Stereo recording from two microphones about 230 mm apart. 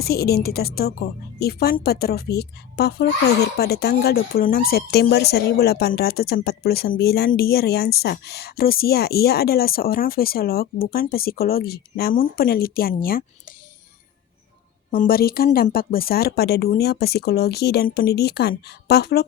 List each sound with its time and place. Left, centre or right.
0.0 s a woman's voice: left
14.8 s a woman's voice: left